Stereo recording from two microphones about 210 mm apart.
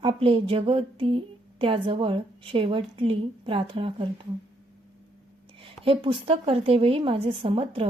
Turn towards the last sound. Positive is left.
turn(degrees=-25)  # may be behind; listen again after turning